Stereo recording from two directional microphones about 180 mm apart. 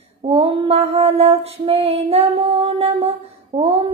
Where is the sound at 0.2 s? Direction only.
30° right (ahead or behind).